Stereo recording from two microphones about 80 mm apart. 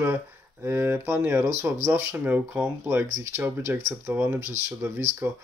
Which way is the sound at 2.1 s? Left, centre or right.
Right.